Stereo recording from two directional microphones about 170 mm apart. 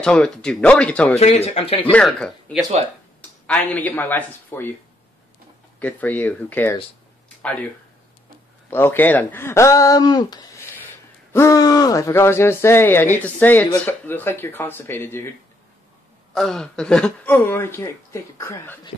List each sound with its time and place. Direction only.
0.0 s speech: 5° left (ahead or behind)
1.2 s speech: 40° left (ahead or behind)
1.9 s speech: 5° left (ahead or behind)
5.8 s speech: 10° left (ahead or behind)
8.6 s speech: 10° left (ahead or behind)
16.3 s speech: 5° left (ahead or behind)